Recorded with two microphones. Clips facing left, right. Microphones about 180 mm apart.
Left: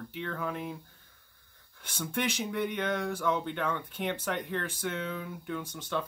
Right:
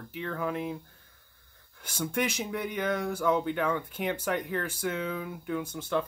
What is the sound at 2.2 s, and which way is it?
Speech, 5° right (ahead or behind).